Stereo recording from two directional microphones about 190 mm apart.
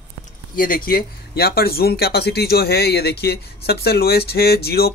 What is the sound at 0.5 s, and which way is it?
Speech, 50° left (ahead or behind).